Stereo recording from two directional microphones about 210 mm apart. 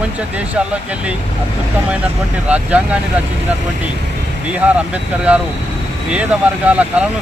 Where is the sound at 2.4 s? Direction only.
5° right (ahead or behind).